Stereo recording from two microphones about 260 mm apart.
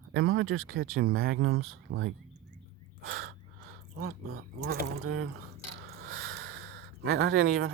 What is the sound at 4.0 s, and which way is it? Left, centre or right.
Speech, right.